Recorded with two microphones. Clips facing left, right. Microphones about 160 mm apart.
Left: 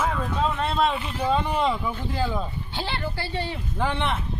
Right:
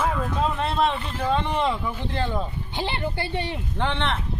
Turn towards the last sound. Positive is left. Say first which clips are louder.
# even
turn(degrees=10)  # may be behind; listen again after turning